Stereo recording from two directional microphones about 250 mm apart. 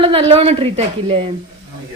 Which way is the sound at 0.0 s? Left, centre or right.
Right.